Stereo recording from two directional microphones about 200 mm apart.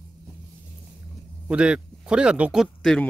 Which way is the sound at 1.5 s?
5° right (ahead or behind).